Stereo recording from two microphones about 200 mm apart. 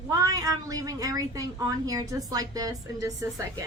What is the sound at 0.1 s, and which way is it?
A woman's voice, 20° right (ahead or behind).